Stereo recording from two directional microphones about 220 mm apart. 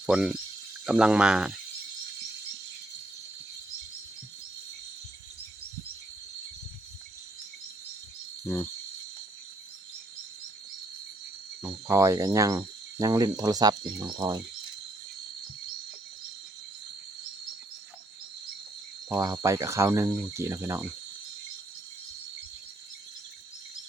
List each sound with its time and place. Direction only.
0.0 s speech: 5° right (ahead or behind)
11.9 s speech: 15° right (ahead or behind)
19.1 s speech: 15° right (ahead or behind)